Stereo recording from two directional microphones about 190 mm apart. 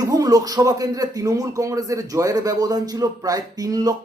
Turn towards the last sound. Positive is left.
turn(degrees=-20)  # may be behind; listen again after turning